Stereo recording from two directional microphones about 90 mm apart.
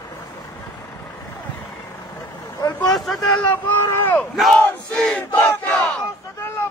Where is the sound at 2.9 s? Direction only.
Centre (ahead or behind).